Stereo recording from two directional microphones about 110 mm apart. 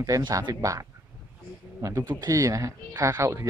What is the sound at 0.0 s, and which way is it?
A man's voice, 30° right (ahead or behind).